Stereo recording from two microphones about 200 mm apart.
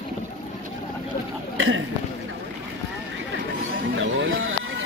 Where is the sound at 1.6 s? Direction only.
80° right.